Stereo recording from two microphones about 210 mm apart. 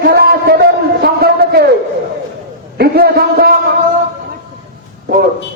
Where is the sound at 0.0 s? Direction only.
50° right (ahead or behind).